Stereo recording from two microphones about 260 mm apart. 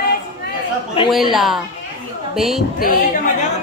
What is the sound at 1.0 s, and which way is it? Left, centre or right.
Speech, left.